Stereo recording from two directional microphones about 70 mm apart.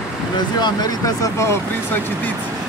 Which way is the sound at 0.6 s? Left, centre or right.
Left.